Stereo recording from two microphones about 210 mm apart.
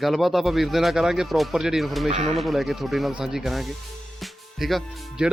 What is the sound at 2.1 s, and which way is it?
Speech, 30° right (ahead or behind).